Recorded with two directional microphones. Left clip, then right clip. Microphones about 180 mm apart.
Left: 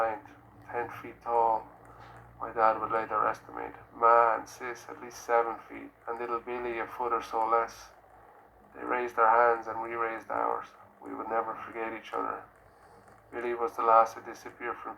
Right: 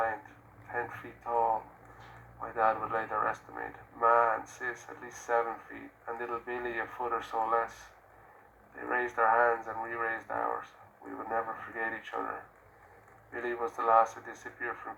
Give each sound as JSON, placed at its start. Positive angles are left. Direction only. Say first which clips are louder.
{"t": 0.7, "sound": "speech", "louder": "left 1 dB", "side_deg": 20}
{"t": 8.8, "sound": "speech", "louder": "left 2 dB", "side_deg": 30}